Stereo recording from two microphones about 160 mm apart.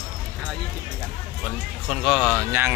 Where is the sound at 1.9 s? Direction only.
Centre (ahead or behind).